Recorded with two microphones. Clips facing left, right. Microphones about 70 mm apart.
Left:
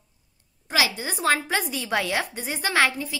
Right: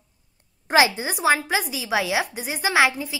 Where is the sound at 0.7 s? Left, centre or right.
Right.